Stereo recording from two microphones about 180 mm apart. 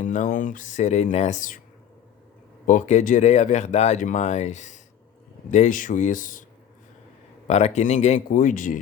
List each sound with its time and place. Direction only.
0.0 s speech: 45° left (ahead or behind)
2.6 s speech: 45° left (ahead or behind)
7.4 s speech: 40° left (ahead or behind)